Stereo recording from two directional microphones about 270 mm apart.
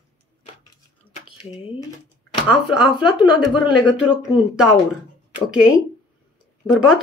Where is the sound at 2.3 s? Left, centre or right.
Centre.